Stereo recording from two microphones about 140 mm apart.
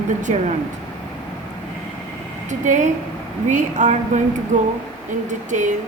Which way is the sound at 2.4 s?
60° right (ahead or behind).